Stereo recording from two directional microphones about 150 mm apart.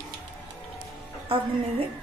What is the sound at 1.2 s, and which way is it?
Music, 35° right (ahead or behind).